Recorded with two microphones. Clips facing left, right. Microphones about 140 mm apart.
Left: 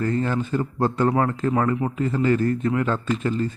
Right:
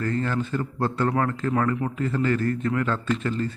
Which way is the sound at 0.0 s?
15° left (ahead or behind).